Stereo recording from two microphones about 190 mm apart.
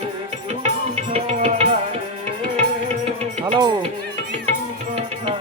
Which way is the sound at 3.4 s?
20° right (ahead or behind).